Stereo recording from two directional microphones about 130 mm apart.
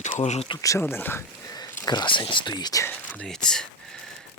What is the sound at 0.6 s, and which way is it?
Speech, 20° left (ahead or behind).